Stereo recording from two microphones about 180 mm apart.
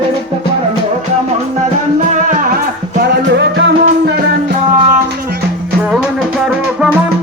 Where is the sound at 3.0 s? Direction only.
70° right (ahead or behind).